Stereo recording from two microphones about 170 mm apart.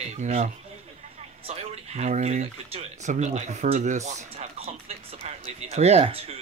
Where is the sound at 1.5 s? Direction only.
40° right (ahead or behind).